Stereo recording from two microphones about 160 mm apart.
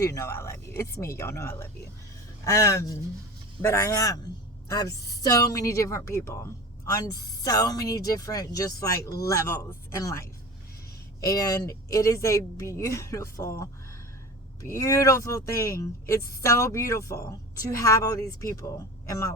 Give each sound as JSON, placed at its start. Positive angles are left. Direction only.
{"t": 0.0, "sound": "a woman's voice", "side_deg": 20}